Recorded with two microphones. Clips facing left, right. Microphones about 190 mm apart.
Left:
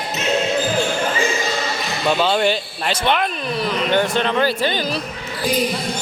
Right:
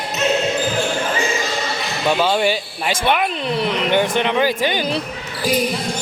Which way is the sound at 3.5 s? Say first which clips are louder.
Right 1 dB; 20° right (ahead or behind).